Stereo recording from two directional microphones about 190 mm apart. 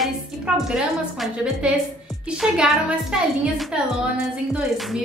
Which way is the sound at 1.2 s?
5° right (ahead or behind).